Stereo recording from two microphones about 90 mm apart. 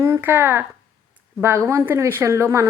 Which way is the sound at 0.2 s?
25° right (ahead or behind).